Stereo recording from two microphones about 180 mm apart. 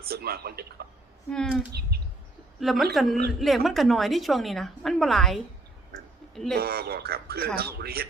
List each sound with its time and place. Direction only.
0.0 s speech: 60° right (ahead or behind)
1.3 s a woman's voice: 5° left (ahead or behind)
6.5 s speech: 60° right (ahead or behind)